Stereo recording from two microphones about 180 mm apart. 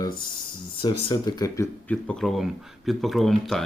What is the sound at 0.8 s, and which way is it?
Speech, 25° left (ahead or behind).